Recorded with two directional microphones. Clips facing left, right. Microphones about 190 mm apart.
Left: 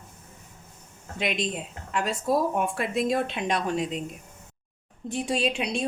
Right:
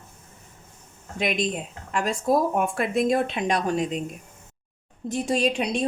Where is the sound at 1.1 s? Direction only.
45° right (ahead or behind).